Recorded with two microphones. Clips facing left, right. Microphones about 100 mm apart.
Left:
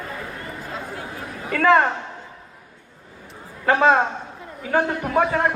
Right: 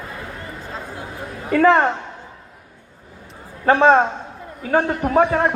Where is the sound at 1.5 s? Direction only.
30° right (ahead or behind).